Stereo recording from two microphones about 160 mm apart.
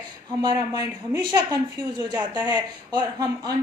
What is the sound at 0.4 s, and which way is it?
A woman's voice, 25° right (ahead or behind).